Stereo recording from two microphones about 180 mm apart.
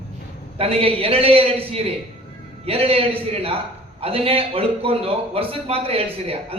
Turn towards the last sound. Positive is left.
turn(degrees=-30)  # may be behind; listen again after turning